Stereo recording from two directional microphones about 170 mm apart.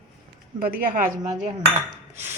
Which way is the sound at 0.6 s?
55° right (ahead or behind).